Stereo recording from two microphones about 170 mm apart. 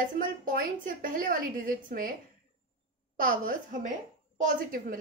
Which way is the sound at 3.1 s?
55° right (ahead or behind).